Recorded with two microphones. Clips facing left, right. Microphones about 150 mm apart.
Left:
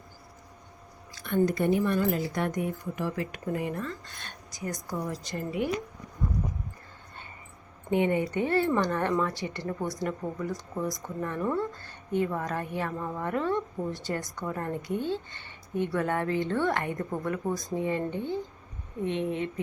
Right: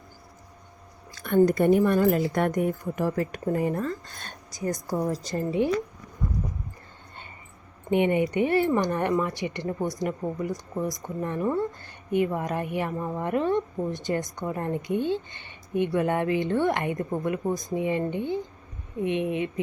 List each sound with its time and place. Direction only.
1.1 s a woman's voice: 50° right (ahead or behind)
5.4 s speech: 25° right (ahead or behind)
7.9 s speech: 20° right (ahead or behind)